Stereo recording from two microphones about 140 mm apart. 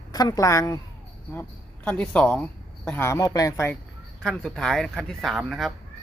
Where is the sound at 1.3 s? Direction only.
10° left (ahead or behind).